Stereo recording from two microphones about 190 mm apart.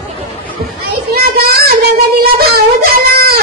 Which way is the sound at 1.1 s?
55° right (ahead or behind).